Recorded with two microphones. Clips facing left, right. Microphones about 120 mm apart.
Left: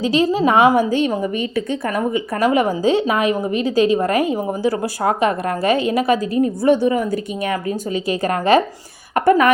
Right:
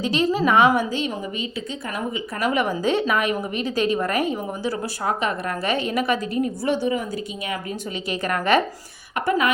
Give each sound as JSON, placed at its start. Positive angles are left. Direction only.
{"t": 0.0, "sound": "a woman's voice", "side_deg": 35}
{"t": 0.9, "sound": "a woman's voice", "side_deg": 50}
{"t": 9.1, "sound": "speech", "side_deg": 50}